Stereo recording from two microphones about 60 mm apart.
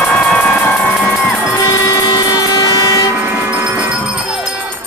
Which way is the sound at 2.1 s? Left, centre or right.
Left.